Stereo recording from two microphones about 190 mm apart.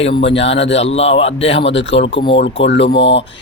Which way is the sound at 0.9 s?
30° left (ahead or behind).